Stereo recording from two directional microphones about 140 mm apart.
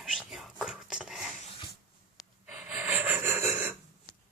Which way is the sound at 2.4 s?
10° right (ahead or behind).